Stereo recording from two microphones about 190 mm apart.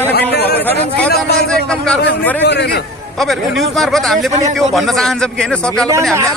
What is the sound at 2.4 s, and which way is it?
Speech, 65° left (ahead or behind).